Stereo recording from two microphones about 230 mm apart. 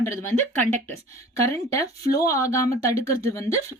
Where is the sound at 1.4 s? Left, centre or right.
Centre.